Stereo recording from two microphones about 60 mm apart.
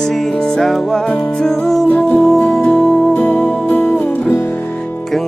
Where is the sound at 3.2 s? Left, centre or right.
Left.